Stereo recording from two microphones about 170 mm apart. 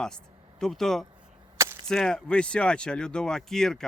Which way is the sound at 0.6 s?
Centre (ahead or behind).